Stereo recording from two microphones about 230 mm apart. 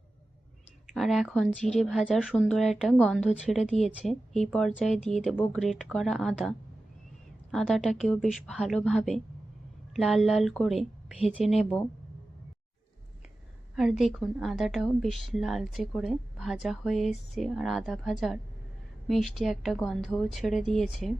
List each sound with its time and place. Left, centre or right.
0.9 s speech: centre
13.7 s speech: centre